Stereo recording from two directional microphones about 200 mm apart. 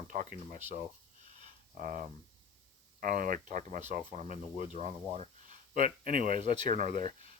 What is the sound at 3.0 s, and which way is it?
Speech, 45° right (ahead or behind).